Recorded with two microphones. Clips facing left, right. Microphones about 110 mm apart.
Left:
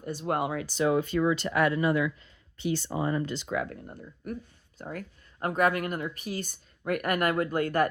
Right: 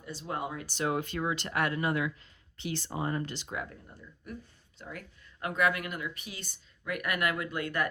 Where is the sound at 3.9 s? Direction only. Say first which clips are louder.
Left 7 dB; 50° left (ahead or behind).